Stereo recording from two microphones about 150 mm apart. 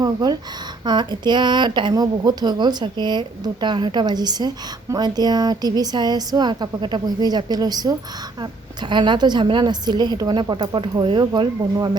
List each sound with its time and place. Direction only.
0.0 s speech: 25° right (ahead or behind)